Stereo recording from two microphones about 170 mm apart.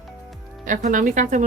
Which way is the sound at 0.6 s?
50° right (ahead or behind).